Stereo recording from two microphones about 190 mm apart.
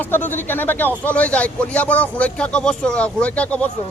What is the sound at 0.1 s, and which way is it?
A man's voice, 10° left (ahead or behind).